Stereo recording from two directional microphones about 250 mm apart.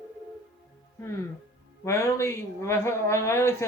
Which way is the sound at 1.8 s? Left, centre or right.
Centre.